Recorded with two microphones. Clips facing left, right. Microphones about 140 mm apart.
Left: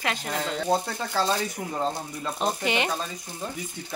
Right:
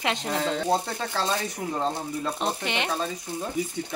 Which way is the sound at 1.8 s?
Centre (ahead or behind).